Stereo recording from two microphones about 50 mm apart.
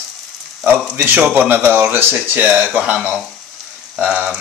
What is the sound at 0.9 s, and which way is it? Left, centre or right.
Speech, right.